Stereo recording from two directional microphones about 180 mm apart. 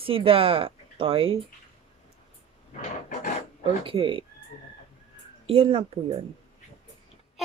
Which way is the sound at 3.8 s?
30° right (ahead or behind).